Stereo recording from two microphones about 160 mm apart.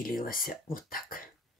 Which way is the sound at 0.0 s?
65° left (ahead or behind).